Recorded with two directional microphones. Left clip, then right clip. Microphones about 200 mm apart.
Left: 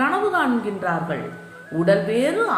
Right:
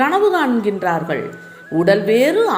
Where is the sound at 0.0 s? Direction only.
35° right (ahead or behind).